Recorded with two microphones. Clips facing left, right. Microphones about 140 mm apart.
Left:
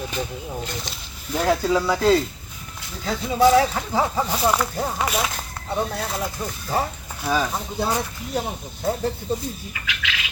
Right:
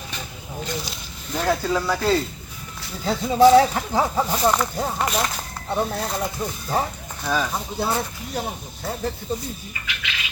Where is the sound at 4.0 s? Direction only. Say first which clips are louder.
Right 1 dB; centre (ahead or behind).